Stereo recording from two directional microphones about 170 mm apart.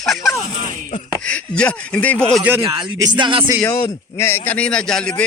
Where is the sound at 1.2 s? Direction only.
5° left (ahead or behind).